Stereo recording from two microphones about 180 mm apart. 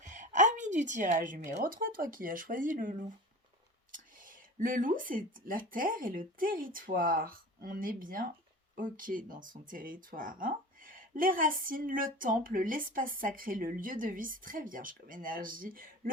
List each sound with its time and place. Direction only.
0.0 s a woman's voice: 45° right (ahead or behind)
3.9 s speech: 50° right (ahead or behind)